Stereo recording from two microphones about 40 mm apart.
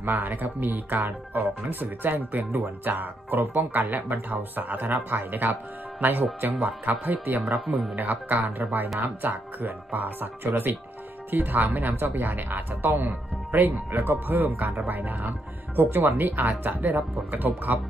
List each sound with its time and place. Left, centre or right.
0.0 s speech: right
15.7 s speech: right